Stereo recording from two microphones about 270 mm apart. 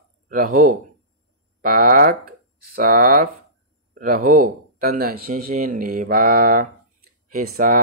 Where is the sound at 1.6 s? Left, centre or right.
Right.